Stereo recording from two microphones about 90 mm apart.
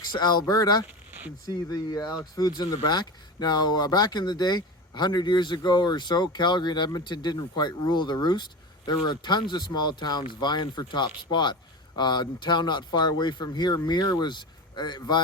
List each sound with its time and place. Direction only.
0.0 s speech: 50° left (ahead or behind)